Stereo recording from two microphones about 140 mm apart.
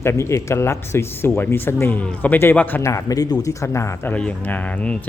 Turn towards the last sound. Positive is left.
turn(degrees=10)  # may be behind; listen again after turning